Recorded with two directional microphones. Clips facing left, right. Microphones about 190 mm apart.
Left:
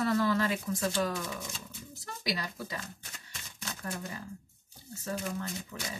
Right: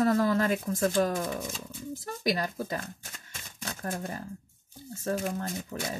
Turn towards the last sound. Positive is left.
turn(degrees=-50)  # may be behind; listen again after turning